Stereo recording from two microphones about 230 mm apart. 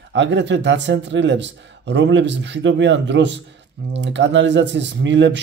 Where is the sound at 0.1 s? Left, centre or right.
Right.